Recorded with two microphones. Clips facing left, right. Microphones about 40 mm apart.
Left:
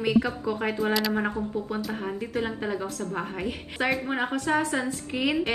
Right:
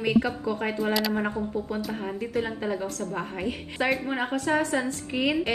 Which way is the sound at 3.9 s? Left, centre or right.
Centre.